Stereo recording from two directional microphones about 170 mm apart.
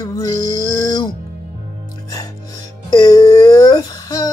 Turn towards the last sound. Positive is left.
turn(degrees=20)  # may be behind; listen again after turning